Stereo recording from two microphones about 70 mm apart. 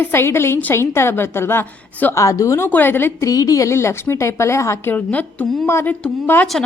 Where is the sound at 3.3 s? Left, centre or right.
Left.